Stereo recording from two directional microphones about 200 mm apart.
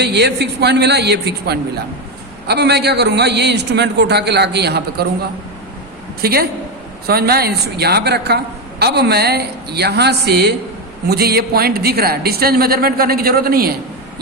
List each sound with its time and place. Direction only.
0.0 s a man's voice: 55° right (ahead or behind)
6.2 s a woman's voice: 50° right (ahead or behind)